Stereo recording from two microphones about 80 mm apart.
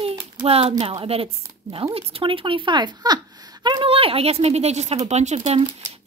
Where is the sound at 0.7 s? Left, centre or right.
Right.